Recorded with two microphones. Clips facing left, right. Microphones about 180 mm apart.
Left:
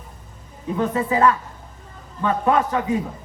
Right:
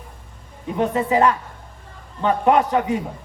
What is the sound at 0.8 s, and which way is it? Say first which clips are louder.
Speech: right 2 dB; 20° right (ahead or behind).